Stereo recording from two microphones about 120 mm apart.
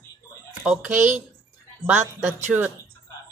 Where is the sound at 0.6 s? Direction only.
15° right (ahead or behind).